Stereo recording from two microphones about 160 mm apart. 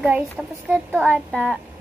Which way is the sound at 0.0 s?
5° right (ahead or behind).